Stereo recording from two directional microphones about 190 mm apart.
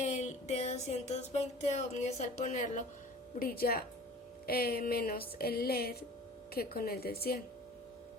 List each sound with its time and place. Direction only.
0.0 s music: 40° left (ahead or behind)
3.3 s speech: 50° left (ahead or behind)
5.4 s a sound: 55° left (ahead or behind)
6.5 s speech: 55° left (ahead or behind)